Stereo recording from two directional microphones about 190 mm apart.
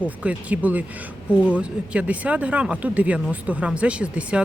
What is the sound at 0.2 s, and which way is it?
Speech, 5° right (ahead or behind).